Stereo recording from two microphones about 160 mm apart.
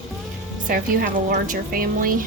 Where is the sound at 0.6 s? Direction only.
60° right (ahead or behind).